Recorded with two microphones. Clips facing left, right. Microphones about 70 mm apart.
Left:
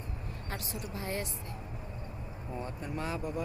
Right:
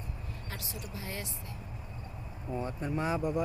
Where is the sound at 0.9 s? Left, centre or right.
Left.